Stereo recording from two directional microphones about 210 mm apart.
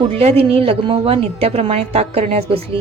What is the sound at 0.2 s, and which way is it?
A woman's voice, 30° right (ahead or behind).